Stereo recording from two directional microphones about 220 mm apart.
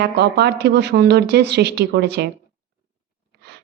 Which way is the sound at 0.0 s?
50° right (ahead or behind).